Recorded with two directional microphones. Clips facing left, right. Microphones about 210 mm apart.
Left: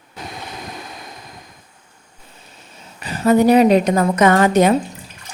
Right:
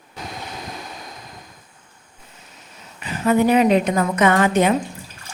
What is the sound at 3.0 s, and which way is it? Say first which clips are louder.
A woman's voice: left 3 dB; 40° left (ahead or behind).